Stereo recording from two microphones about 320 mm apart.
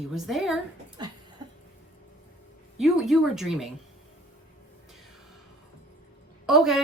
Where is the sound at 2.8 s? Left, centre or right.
Centre.